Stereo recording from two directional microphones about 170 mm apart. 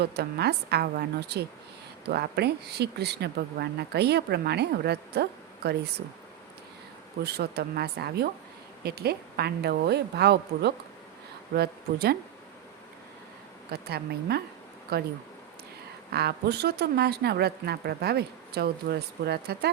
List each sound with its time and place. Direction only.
0.0 s speech: 75° right (ahead or behind)
7.2 s speech: 75° right (ahead or behind)
13.7 s speech: 70° right (ahead or behind)
16.0 s speech: 70° right (ahead or behind)